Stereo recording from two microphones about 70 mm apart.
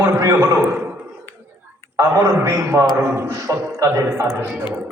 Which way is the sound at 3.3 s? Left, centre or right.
Right.